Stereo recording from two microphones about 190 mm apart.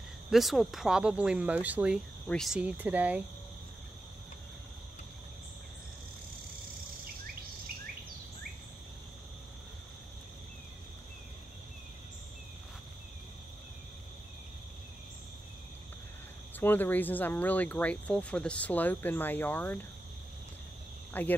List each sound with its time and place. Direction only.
0.3 s speech: centre (ahead or behind)
16.5 s speech: 10° left (ahead or behind)
21.1 s speech: 10° left (ahead or behind)